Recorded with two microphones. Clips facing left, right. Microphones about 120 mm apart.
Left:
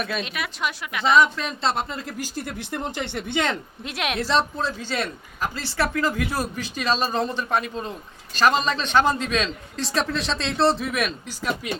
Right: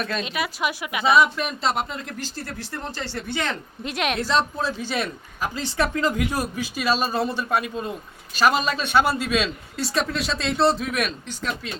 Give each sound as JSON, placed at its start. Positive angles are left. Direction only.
{"t": 0.0, "sound": "speech", "side_deg": 5}
{"t": 3.8, "sound": "speech", "side_deg": 0}
{"t": 4.6, "sound": "speech", "side_deg": -10}